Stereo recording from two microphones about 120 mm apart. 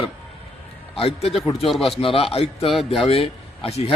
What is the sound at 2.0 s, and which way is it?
A man's voice, 50° left (ahead or behind).